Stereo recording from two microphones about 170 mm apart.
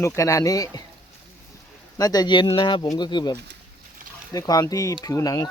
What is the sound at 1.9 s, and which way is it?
Speech, 20° left (ahead or behind).